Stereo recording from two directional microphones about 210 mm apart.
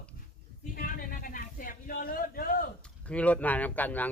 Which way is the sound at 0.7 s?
40° left (ahead or behind).